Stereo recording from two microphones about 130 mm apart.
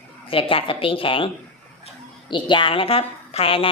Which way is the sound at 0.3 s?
45° left (ahead or behind).